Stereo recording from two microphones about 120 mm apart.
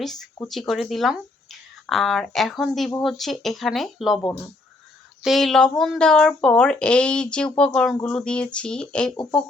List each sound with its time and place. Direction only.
0.0 s speech: 5° left (ahead or behind)